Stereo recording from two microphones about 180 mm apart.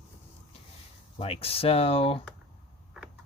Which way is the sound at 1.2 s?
35° left (ahead or behind).